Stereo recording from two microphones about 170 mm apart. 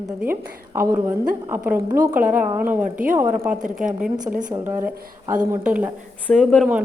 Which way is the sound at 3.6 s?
50° right (ahead or behind).